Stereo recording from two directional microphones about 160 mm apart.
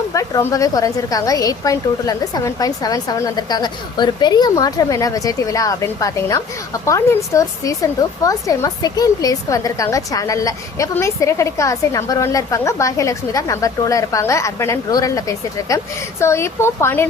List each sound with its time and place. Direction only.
0.1 s speech: 20° left (ahead or behind)